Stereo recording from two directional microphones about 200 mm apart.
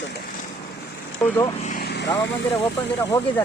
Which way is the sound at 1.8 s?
55° left (ahead or behind).